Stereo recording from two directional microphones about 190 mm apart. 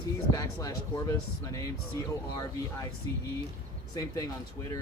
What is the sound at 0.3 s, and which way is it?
Speech, 20° left (ahead or behind).